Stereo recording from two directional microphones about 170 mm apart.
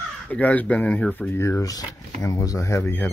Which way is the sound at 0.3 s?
10° left (ahead or behind).